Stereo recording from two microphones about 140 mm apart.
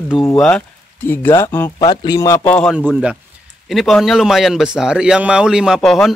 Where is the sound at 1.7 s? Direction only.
30° left (ahead or behind).